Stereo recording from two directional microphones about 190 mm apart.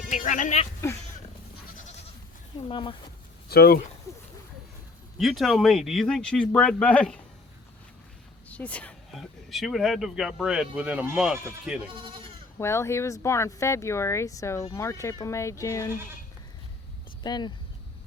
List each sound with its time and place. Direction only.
0.1 s speech: 40° left (ahead or behind)
2.6 s speech: 25° left (ahead or behind)
3.5 s speech: 55° left (ahead or behind)
5.1 s speech: centre (ahead or behind)
8.4 s speech: 5° left (ahead or behind)
11.9 s speech: 25° right (ahead or behind)
12.5 s speech: 15° left (ahead or behind)
17.2 s speech: 20° left (ahead or behind)